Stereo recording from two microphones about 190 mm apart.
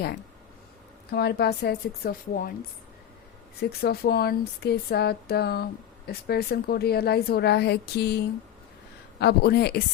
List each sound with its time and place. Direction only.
1.1 s a woman's voice: 55° left (ahead or behind)
3.6 s a woman's voice: 55° left (ahead or behind)
9.2 s a woman's voice: 60° left (ahead or behind)